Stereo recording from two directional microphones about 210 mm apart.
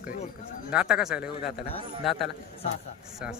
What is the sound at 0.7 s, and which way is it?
Speech, 5° right (ahead or behind).